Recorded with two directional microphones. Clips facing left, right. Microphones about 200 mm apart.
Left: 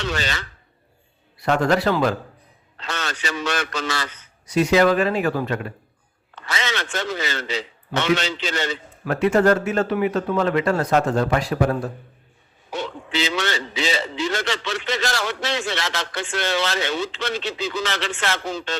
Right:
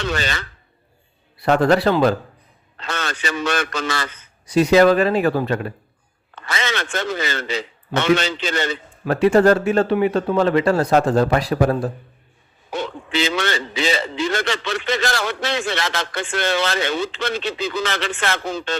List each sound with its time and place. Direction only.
0.0 s a man's voice: 55° right (ahead or behind)
1.4 s speech: 35° right (ahead or behind)
2.7 s a man's voice: 55° right (ahead or behind)
4.4 s speech: 35° right (ahead or behind)
6.3 s a man's voice: 55° right (ahead or behind)
9.0 s speech: 30° right (ahead or behind)
12.7 s a man's voice: 55° right (ahead or behind)